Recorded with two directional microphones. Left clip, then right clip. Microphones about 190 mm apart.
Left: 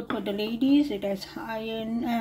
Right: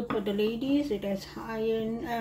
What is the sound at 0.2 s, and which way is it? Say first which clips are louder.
A woman's voice: left 3 dB; 55° left (ahead or behind).